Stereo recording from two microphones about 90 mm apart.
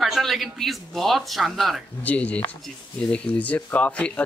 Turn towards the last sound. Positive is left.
turn(degrees=15)  # may be behind; listen again after turning